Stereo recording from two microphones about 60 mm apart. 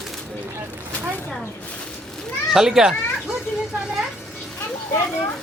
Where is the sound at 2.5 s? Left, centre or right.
Centre.